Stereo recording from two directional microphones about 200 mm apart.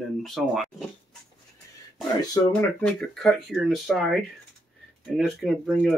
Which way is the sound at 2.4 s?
20° left (ahead or behind).